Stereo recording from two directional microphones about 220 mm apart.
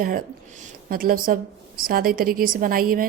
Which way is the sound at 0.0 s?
40° right (ahead or behind).